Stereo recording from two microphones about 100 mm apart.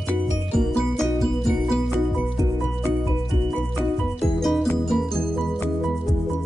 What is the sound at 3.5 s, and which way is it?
Music, 20° left (ahead or behind).